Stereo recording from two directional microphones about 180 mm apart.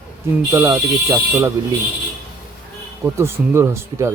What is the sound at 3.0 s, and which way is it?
Speech, 15° right (ahead or behind).